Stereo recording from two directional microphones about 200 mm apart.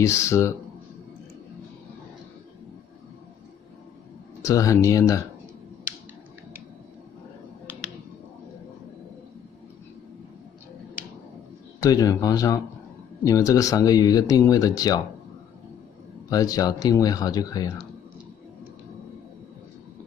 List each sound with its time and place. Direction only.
0.0 s speech: 15° left (ahead or behind)
4.4 s speech: 15° left (ahead or behind)
11.8 s speech: 15° left (ahead or behind)
16.3 s speech: 20° left (ahead or behind)